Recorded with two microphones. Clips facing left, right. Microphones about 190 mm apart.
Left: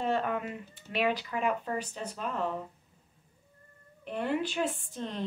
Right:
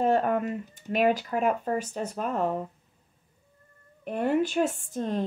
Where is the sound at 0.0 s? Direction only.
45° right (ahead or behind).